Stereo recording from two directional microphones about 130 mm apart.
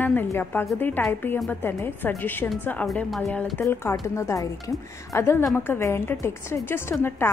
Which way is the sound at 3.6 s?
20° left (ahead or behind).